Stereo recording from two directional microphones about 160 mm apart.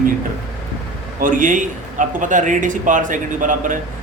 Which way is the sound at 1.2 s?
55° right (ahead or behind).